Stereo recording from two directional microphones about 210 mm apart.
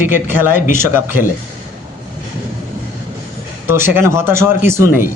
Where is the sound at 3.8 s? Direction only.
10° right (ahead or behind).